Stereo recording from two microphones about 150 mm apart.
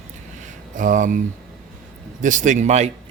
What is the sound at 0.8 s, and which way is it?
Speech, 60° right (ahead or behind).